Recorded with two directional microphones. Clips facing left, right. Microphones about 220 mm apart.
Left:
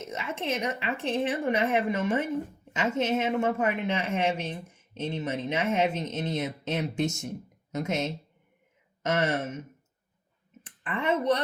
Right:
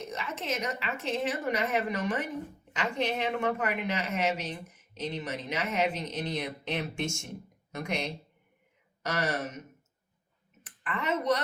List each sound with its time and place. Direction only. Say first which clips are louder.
0.0 s a woman's voice: left 3 dB; 25° left (ahead or behind)
10.6 s clicking: left 3 dB; 30° left (ahead or behind)